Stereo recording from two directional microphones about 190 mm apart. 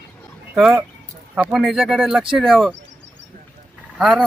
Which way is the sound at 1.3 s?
5° right (ahead or behind).